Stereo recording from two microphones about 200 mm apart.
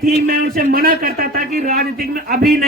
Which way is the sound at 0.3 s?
45° right (ahead or behind).